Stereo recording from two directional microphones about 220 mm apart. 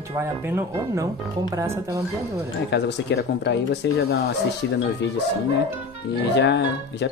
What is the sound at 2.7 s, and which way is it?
Speech, 50° left (ahead or behind).